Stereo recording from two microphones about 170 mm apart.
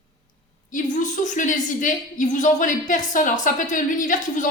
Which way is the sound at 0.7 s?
50° left (ahead or behind).